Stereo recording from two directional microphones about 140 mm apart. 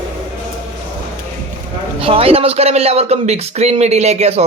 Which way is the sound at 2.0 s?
45° right (ahead or behind).